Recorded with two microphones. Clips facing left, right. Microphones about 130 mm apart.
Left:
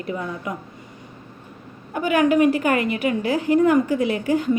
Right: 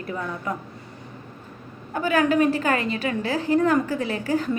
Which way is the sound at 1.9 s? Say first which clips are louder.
Left 2 dB; 15° left (ahead or behind).